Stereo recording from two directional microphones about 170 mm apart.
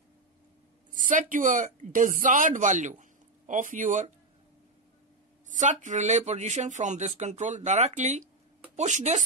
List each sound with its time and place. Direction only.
0.9 s speech: 50° right (ahead or behind)
5.5 s speech: 45° right (ahead or behind)